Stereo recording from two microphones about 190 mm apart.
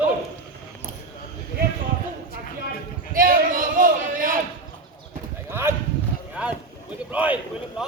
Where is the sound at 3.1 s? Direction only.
50° right (ahead or behind).